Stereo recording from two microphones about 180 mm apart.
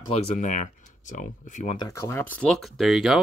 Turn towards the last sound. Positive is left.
turn(degrees=0)  # may be behind; listen again after turning